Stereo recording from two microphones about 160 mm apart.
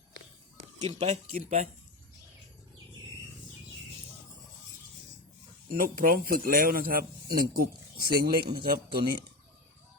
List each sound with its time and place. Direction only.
0.8 s speech: 45° right (ahead or behind)
5.6 s speech: 60° right (ahead or behind)